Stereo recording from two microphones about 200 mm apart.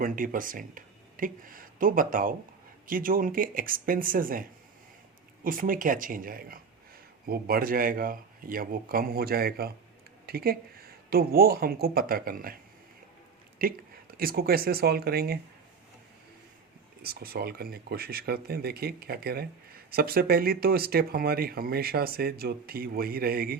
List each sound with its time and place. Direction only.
0.0 s speech: 45° right (ahead or behind)
13.6 s speech: 45° right (ahead or behind)
17.0 s speech: 50° right (ahead or behind)